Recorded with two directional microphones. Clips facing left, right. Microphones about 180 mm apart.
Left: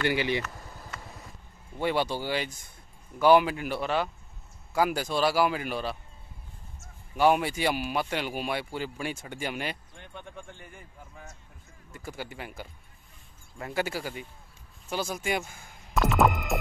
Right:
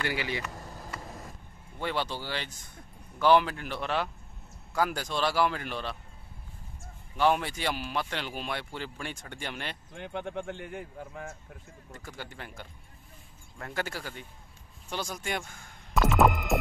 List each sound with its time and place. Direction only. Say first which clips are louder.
0.1 s speech: left 6 dB; 25° left (ahead or behind)
1.8 s speech: left 5 dB; 10° left (ahead or behind)
7.2 s speech: left 3 dB; 10° left (ahead or behind)
9.9 s speech: right 9 dB; 80° right
11.9 s speech: left 4 dB; 10° left (ahead or behind)